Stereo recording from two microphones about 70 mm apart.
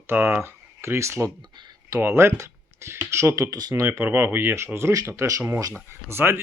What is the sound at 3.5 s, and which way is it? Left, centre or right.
Speech, right.